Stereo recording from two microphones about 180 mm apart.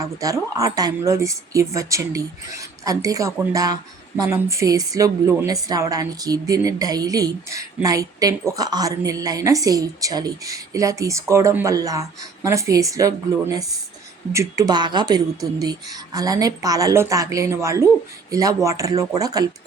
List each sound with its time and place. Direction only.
0.0 s a woman's voice: 20° right (ahead or behind)